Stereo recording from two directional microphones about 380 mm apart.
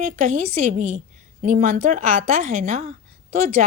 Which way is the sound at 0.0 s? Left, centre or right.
Centre.